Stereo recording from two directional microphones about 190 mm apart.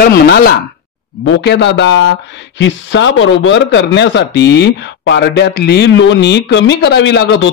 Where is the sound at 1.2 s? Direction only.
65° left (ahead or behind).